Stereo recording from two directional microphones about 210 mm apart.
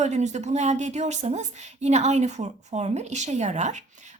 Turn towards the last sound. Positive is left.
turn(degrees=-35)  # may be behind; listen again after turning